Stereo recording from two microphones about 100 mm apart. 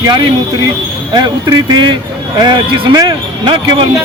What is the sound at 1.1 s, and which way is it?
Speech, 45° right (ahead or behind).